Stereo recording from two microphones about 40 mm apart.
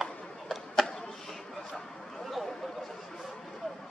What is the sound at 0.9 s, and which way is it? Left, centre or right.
Chop, centre.